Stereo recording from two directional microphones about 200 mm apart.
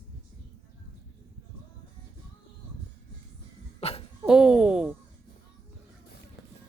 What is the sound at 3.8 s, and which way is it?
Cough, 30° left (ahead or behind).